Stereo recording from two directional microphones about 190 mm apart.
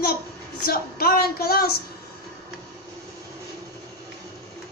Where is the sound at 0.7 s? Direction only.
50° left (ahead or behind).